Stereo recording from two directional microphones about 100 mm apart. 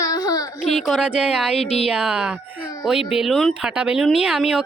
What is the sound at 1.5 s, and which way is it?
Speech, 90° left.